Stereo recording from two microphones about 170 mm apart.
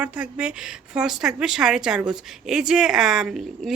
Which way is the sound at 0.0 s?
5° right (ahead or behind).